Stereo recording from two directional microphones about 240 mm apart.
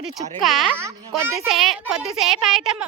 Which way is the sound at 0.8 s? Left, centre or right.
Centre.